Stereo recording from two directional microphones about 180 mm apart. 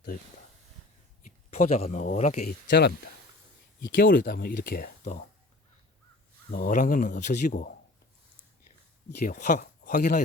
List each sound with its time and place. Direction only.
1.2 s speech: 45° left (ahead or behind)
2.6 s speech: 65° left (ahead or behind)
3.8 s speech: 50° left (ahead or behind)
6.5 s speech: 50° left (ahead or behind)
9.2 s speech: 45° left (ahead or behind)